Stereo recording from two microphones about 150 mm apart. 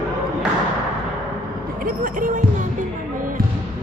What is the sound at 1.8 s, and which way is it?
Speech, 65° right (ahead or behind).